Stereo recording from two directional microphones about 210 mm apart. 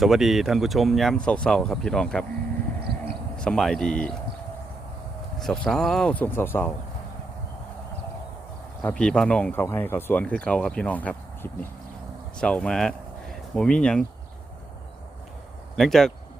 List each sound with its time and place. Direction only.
0.0 s speech: centre (ahead or behind)
2.9 s a sound: 50° right (ahead or behind)
3.3 s speech: 5° left (ahead or behind)
5.4 s speech: 5° left (ahead or behind)
8.9 s speech: 5° left (ahead or behind)
15.7 s speech: centre (ahead or behind)